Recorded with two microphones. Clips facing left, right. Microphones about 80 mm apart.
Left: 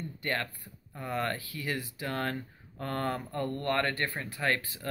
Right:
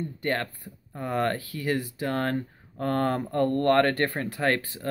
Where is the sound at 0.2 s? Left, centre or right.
Right.